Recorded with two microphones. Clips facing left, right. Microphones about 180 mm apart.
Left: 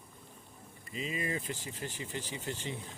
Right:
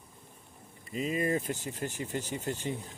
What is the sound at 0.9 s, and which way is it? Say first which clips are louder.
Speech: right 7 dB; 45° right (ahead or behind).